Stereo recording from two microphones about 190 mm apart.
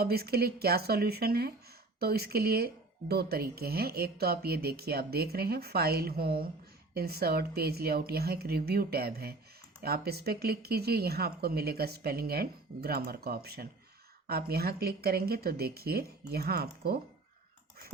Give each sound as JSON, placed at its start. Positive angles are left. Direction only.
{"t": 0.0, "sound": "speech", "side_deg": -55}